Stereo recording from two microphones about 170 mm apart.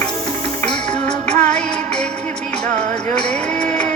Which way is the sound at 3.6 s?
40° right (ahead or behind).